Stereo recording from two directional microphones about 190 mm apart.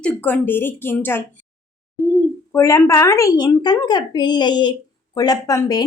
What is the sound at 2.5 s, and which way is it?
A woman's voice, 15° left (ahead or behind).